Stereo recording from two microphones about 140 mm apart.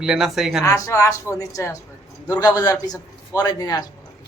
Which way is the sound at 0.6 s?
20° left (ahead or behind).